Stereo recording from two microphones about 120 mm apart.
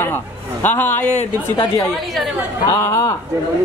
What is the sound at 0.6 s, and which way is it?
Speech, 15° left (ahead or behind).